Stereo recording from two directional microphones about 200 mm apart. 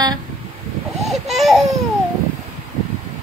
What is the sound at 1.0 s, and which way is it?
Baby cry, centre (ahead or behind).